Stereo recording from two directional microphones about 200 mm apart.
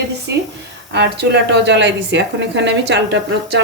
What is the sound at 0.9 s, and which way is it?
A woman's voice, 60° right (ahead or behind).